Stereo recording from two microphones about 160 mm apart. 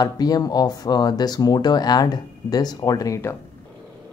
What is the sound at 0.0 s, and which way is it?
Speech, 25° left (ahead or behind).